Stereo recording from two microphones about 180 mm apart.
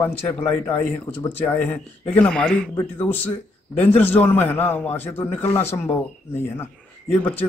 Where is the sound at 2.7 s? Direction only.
15° left (ahead or behind).